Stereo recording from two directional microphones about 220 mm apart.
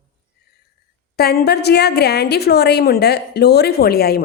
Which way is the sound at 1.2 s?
45° left (ahead or behind).